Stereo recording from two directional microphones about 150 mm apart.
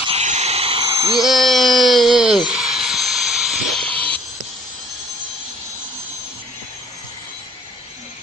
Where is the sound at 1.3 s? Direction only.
Centre (ahead or behind).